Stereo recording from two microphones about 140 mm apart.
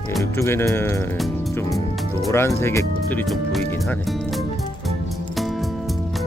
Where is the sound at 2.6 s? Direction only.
20° left (ahead or behind).